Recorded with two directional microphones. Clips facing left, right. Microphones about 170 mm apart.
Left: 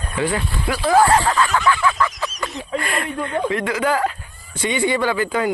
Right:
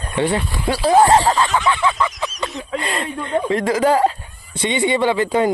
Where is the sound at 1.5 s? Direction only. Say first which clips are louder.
Even; 20° right (ahead or behind).